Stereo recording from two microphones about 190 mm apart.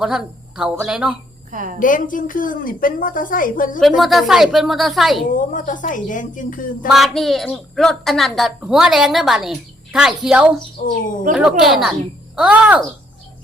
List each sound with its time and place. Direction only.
0.0 s a woman's voice: 5° right (ahead or behind)
1.5 s a woman's voice: 45° right (ahead or behind)
1.8 s a woman's voice: 45° left (ahead or behind)
3.8 s a woman's voice: centre (ahead or behind)
5.3 s a woman's voice: 45° left (ahead or behind)
6.8 s a woman's voice: centre (ahead or behind)
10.8 s speech: 40° left (ahead or behind)
11.3 s a woman's voice: 5° right (ahead or behind)